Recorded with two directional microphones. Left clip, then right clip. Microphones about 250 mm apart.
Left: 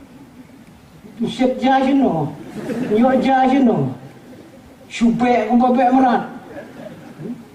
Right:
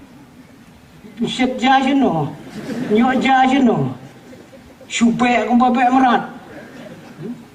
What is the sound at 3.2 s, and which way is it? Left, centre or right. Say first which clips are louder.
Speech: right 1 dB; centre.